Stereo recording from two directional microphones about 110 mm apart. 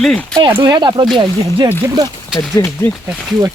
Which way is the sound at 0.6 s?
40° right (ahead or behind).